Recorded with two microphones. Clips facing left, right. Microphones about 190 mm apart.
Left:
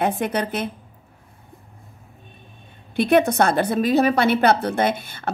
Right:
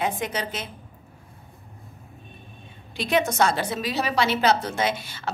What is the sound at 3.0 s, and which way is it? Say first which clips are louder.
A woman's voice: left 5 dB; 55° left (ahead or behind).